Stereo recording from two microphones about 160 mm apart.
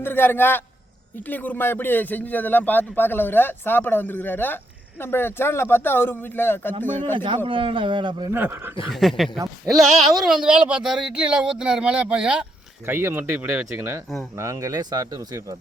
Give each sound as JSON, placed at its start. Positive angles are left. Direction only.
{"t": 0.0, "sound": "a man's voice", "side_deg": 15}
{"t": 7.3, "sound": "a man's voice", "side_deg": -30}
{"t": 8.3, "sound": "speech", "side_deg": -15}
{"t": 8.9, "sound": "speech", "side_deg": 0}